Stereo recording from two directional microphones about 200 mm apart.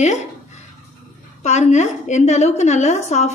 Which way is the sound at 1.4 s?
35° left (ahead or behind).